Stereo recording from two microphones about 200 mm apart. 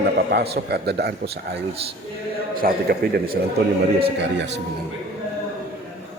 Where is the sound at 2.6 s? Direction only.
50° right (ahead or behind).